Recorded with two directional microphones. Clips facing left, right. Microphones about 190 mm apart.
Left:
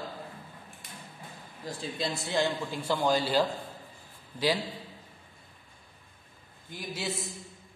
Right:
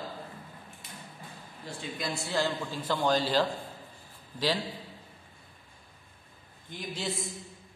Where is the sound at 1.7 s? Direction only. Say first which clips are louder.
Left 3 dB; 40° left (ahead or behind).